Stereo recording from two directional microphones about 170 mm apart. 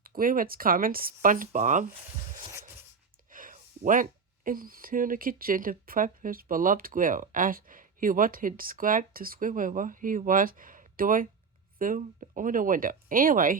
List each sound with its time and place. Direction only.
0.0 s speech: 55° right (ahead or behind)
3.2 s speech: 55° right (ahead or behind)